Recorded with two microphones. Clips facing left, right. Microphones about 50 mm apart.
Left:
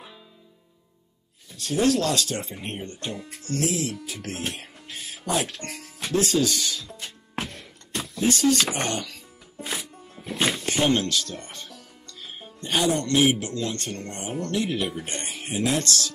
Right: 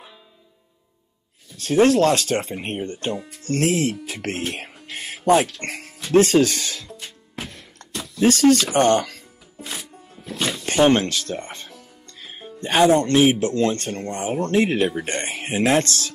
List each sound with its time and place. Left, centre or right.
1.6 s speech: right
3.4 s speech: right
4.6 s music: right
6.1 s speech: right
7.4 s a sound: left
8.2 s speech: right
10.2 s music: left
10.7 s music: right
12.5 s speech: right